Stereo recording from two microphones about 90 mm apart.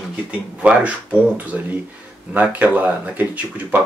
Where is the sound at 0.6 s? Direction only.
15° right (ahead or behind).